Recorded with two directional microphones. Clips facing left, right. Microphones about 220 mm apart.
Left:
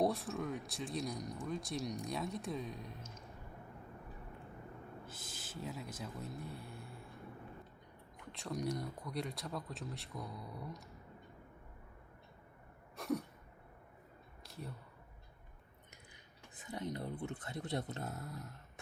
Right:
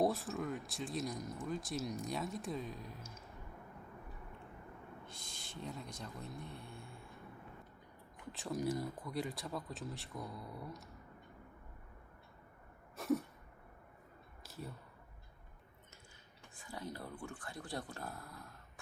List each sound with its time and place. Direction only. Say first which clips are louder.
0.0 s speech: even; centre (ahead or behind)
5.0 s speech: left 2 dB; 5° left (ahead or behind)
8.3 s speech: right 2 dB; 5° right (ahead or behind)
13.0 s a sound: right 3 dB; centre (ahead or behind)
14.4 s a sound: right 1 dB; centre (ahead or behind)
16.6 s speech: left 4 dB; 20° left (ahead or behind)